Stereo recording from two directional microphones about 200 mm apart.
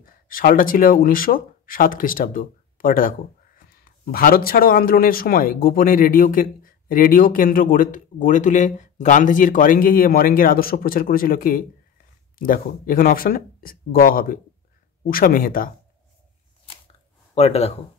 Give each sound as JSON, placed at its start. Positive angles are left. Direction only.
{"t": 0.0, "sound": "speech", "side_deg": 45}
{"t": 17.3, "sound": "speech", "side_deg": 30}